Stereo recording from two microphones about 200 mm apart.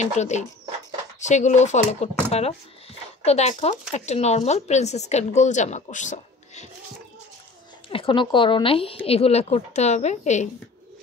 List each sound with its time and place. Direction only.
0.0 s speech: 35° left (ahead or behind)
3.3 s speech: 35° left (ahead or behind)
7.9 s speech: 25° left (ahead or behind)